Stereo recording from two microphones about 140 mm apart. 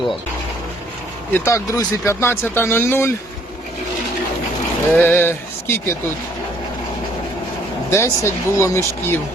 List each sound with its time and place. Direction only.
1.3 s speech: 20° left (ahead or behind)
4.9 s speech: 15° left (ahead or behind)
7.9 s speech: 20° left (ahead or behind)